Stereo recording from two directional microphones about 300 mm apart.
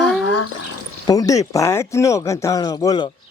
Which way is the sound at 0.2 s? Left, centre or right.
Left.